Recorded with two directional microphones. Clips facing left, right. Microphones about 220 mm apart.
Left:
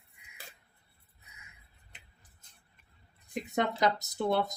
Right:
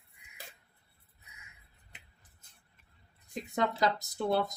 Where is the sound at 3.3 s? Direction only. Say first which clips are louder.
Left 1 dB; 20° left (ahead or behind).